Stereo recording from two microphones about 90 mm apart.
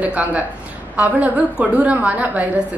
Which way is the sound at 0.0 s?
15° right (ahead or behind).